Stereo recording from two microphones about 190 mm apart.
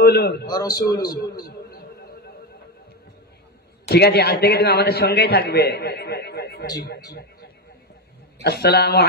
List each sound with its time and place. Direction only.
0.0 s a man's voice: 60° left (ahead or behind)
0.5 s a man's voice: 20° left (ahead or behind)
1.4 s a sound: 55° left (ahead or behind)
3.9 s a man's voice: 60° left (ahead or behind)
8.4 s a man's voice: 60° left (ahead or behind)